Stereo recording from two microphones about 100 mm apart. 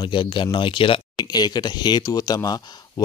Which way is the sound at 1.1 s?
40° left (ahead or behind).